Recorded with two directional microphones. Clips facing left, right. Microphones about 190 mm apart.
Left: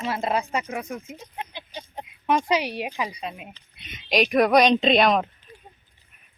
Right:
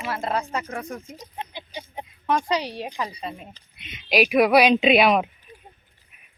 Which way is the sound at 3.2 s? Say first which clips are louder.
Even; centre (ahead or behind).